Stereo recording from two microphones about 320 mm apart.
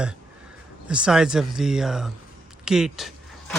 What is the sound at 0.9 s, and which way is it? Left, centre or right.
A man's voice, centre.